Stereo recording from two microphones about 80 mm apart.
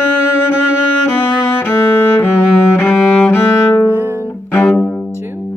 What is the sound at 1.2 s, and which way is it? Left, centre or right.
Music, left.